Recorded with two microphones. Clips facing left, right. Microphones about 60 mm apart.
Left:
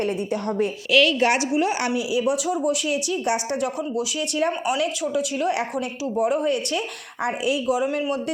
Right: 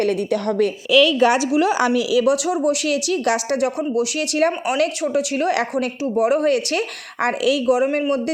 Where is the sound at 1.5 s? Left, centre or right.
Right.